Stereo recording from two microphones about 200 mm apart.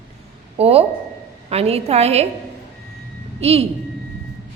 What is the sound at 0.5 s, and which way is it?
A woman's voice, 30° right (ahead or behind).